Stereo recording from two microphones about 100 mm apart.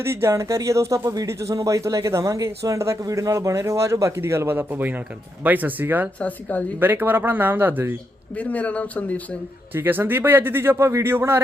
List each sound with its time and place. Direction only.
0.0 s speech: 25° right (ahead or behind)
6.1 s speech: 15° left (ahead or behind)
6.7 s speech: 20° right (ahead or behind)
8.4 s speech: 15° left (ahead or behind)
9.7 s speech: 20° right (ahead or behind)